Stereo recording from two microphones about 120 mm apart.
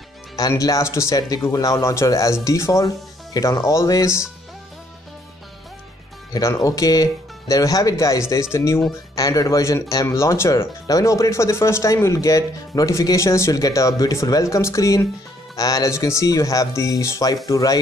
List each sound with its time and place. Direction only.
0.4 s speech: 30° left (ahead or behind)
6.3 s speech: 25° left (ahead or behind)